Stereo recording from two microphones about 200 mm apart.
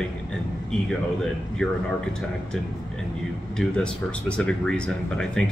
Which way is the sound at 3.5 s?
5° left (ahead or behind).